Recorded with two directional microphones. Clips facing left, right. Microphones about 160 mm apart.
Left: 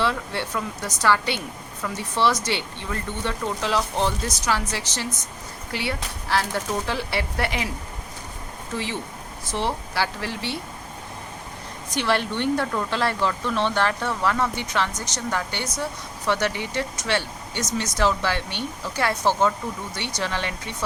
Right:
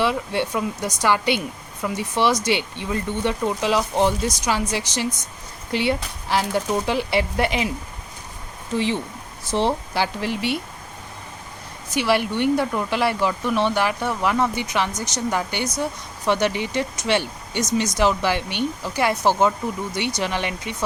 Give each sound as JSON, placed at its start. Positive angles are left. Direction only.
{"t": 0.0, "sound": "speech", "side_deg": -15}
{"t": 8.7, "sound": "speech", "side_deg": -20}
{"t": 9.5, "sound": "speech", "side_deg": -30}
{"t": 9.9, "sound": "speech", "side_deg": -20}
{"t": 11.9, "sound": "speech", "side_deg": -10}